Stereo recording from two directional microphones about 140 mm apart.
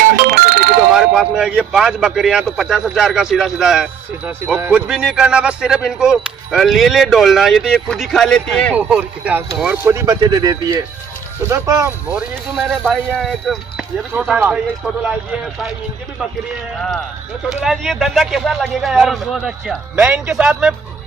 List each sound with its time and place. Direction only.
0.1 s music: 90° right
0.9 s speech: 5° right (ahead or behind)
8.7 s speech: 10° right (ahead or behind)
9.9 s speech: 25° right (ahead or behind)
12.1 s speech: 5° right (ahead or behind)
17.5 s speech: centre (ahead or behind)